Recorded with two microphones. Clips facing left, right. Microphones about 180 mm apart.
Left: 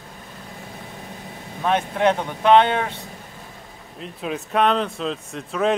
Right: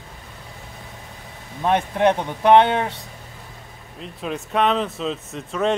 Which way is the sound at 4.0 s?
Centre (ahead or behind).